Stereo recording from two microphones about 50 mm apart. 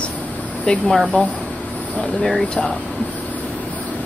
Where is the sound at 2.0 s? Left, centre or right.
Centre.